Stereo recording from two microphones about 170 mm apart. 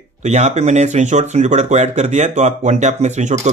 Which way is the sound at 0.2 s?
40° right (ahead or behind).